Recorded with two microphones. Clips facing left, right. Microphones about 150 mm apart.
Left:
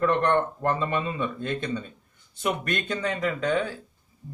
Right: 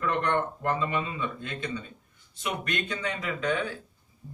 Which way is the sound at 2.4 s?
45° left (ahead or behind).